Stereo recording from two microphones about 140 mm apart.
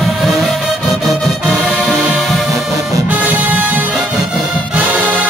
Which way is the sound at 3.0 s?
10° right (ahead or behind).